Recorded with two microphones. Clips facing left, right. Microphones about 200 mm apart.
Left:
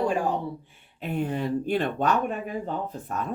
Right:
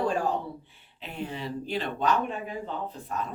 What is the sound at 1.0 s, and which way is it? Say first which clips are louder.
Speech: left 8 dB; 50° left (ahead or behind).